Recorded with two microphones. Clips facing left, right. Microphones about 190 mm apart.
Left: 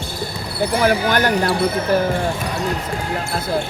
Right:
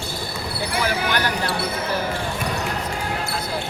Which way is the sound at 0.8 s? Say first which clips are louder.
Left 6 dB; 50° left (ahead or behind).